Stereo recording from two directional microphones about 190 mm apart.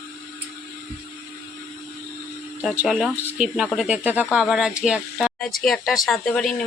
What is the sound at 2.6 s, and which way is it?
Speech, centre (ahead or behind).